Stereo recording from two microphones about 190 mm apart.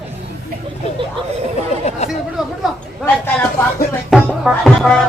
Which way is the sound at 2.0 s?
35° left (ahead or behind).